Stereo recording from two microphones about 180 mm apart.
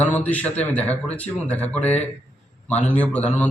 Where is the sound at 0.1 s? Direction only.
10° left (ahead or behind).